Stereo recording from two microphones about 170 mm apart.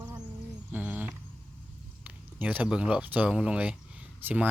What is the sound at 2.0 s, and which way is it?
Speech, 10° right (ahead or behind).